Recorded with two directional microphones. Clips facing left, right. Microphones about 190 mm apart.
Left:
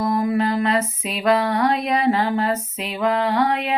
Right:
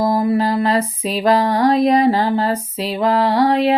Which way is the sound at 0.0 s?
35° right (ahead or behind).